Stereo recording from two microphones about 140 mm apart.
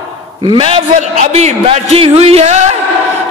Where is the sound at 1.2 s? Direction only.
55° right (ahead or behind).